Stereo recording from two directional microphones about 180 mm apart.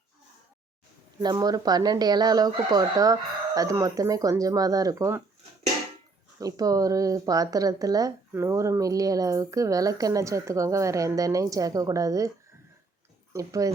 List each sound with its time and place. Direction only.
1.2 s speech: 20° right (ahead or behind)
6.4 s speech: 20° right (ahead or behind)
13.3 s speech: 20° right (ahead or behind)